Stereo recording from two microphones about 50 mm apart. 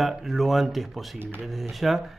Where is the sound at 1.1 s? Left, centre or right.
Right.